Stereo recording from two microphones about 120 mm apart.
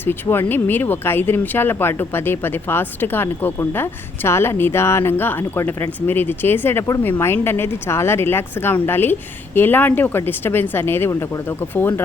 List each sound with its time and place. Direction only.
0.0 s speech: 20° left (ahead or behind)